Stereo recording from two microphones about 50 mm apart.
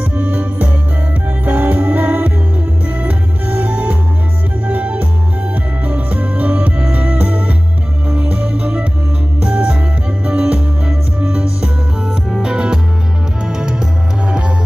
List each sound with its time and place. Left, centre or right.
0.1 s music: right